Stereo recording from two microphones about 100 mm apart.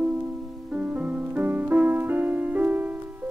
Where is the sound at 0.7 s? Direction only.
15° right (ahead or behind).